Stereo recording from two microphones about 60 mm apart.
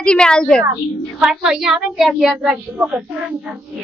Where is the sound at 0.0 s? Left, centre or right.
Centre.